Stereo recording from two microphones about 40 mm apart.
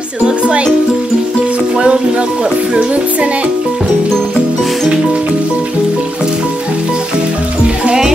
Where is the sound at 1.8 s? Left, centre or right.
Right.